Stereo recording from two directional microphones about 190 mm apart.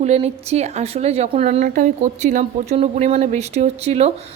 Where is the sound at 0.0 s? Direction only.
35° right (ahead or behind).